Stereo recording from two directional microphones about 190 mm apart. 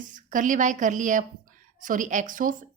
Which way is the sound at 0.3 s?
40° right (ahead or behind).